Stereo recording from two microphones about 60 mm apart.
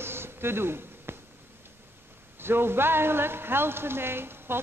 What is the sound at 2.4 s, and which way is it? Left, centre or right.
A man's voice, right.